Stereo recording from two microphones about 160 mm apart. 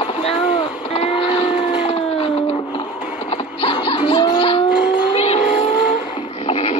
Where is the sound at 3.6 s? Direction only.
35° left (ahead or behind).